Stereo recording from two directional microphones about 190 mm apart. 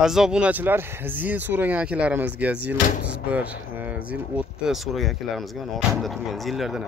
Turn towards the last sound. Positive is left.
turn(degrees=0)  # may be behind; listen again after turning